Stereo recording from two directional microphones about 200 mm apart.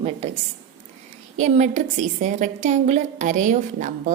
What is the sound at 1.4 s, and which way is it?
A woman's voice, 35° right (ahead or behind).